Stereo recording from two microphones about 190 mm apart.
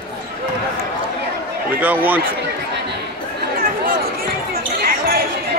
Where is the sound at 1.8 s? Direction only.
10° right (ahead or behind).